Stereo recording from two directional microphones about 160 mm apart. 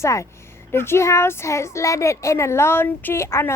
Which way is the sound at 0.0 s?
20° left (ahead or behind).